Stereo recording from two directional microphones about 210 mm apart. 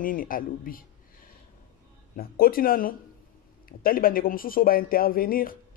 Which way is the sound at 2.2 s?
45° left (ahead or behind).